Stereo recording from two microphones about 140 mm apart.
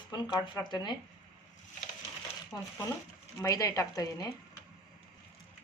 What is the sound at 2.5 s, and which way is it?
Speech, 20° left (ahead or behind).